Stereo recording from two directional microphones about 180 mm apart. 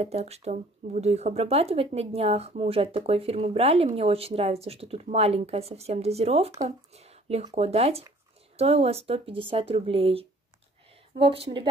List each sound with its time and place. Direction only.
0.0 s speech: 35° right (ahead or behind)
6.9 s a sound: 35° right (ahead or behind)
7.5 s speech: 35° right (ahead or behind)